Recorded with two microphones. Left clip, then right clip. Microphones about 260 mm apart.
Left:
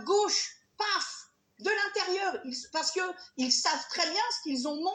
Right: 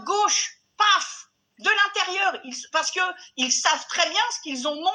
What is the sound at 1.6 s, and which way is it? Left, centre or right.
Speech, right.